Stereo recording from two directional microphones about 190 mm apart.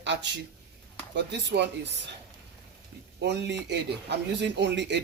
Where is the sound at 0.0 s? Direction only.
65° right (ahead or behind).